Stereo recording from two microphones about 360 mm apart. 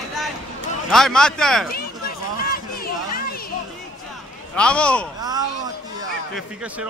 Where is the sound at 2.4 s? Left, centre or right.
Left.